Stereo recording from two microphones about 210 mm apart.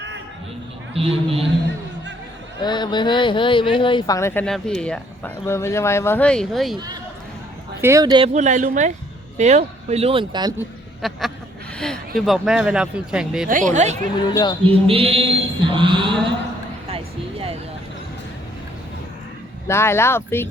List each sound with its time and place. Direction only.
0.9 s speech: 30° right (ahead or behind)
2.6 s speech: 20° left (ahead or behind); by 6.7 s centre (ahead or behind)
7.8 s speech: 15° right (ahead or behind)
8.3 s speech: 35° right (ahead or behind)
11.0 s speech: centre (ahead or behind)
13.5 s speech: 40° right (ahead or behind)
14.3 s speech: 20° left (ahead or behind)
14.7 s speech: 25° right (ahead or behind)
19.6 s speech: 10° left (ahead or behind)